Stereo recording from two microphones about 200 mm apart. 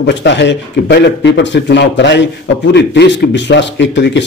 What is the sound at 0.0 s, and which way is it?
Speech, 60° left (ahead or behind).